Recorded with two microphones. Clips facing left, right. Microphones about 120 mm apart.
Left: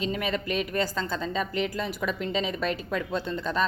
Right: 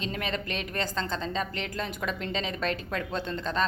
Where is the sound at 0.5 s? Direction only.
40° right (ahead or behind).